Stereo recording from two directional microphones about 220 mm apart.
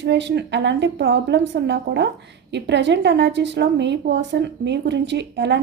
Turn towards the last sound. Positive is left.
turn(degrees=-50)  # may be behind; listen again after turning